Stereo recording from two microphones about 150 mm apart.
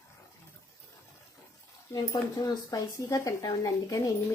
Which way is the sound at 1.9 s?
25° left (ahead or behind).